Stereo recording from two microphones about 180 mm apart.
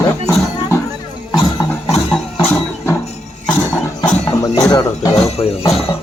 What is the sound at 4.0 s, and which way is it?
Speech, 20° left (ahead or behind).